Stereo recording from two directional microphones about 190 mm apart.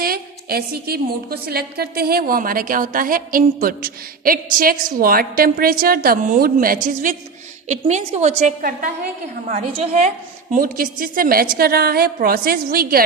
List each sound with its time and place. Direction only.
0.0 s a woman's voice: 50° right (ahead or behind); by 10.1 s 35° right (ahead or behind)
10.5 s a woman's voice: 45° right (ahead or behind)